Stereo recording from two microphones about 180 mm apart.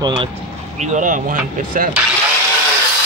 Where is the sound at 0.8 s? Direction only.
45° right (ahead or behind).